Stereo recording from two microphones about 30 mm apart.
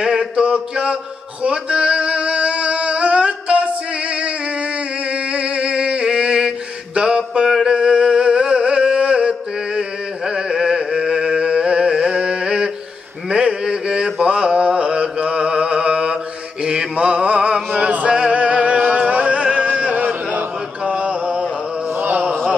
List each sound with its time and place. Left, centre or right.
0.0 s mantra: centre
0.4 s mantra: right
1.4 s music: right
5.1 s a sound: right
7.4 s a sound: centre
7.7 s a sound: right
9.0 s chant: right
9.8 s a sound: right
14.8 s mantra: right
17.7 s male singing: right
18.3 s music: right
20.8 s mantra: right